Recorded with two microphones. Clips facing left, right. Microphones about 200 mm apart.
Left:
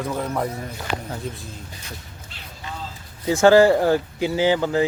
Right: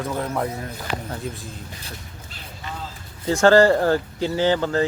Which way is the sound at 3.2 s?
10° left (ahead or behind).